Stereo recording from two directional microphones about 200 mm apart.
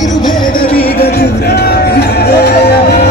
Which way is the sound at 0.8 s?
50° left (ahead or behind).